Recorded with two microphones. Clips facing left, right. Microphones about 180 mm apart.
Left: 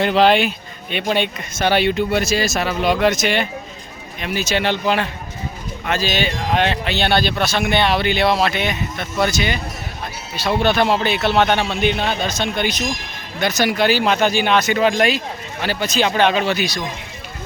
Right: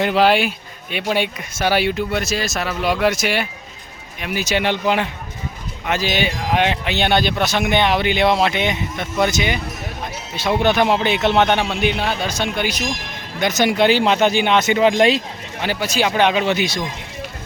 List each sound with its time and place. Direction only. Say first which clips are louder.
0.0 s speech: left 1 dB; 10° right (ahead or behind)
13.4 s speech: right 2 dB; 20° right (ahead or behind)
15.6 s speech: even; 15° right (ahead or behind)